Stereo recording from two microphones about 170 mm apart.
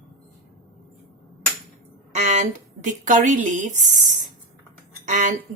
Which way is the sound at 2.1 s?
45° right (ahead or behind).